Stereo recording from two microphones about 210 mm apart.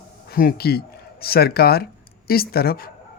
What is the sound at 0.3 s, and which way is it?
Speech, 45° left (ahead or behind).